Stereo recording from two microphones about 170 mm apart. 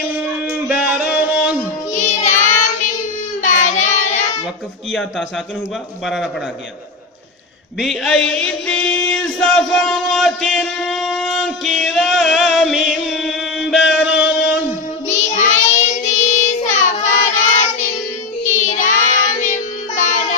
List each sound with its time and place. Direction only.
0.1 s music: 10° right (ahead or behind)
2.0 s child singing: 45° left (ahead or behind)
7.8 s a sound: centre (ahead or behind)
13.9 s music: 5° right (ahead or behind)
15.0 s child singing: 45° left (ahead or behind)